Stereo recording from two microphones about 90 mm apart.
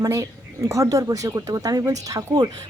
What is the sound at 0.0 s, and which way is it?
A woman's voice, 40° right (ahead or behind).